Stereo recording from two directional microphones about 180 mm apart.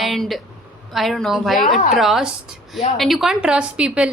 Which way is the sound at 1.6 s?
50° left (ahead or behind).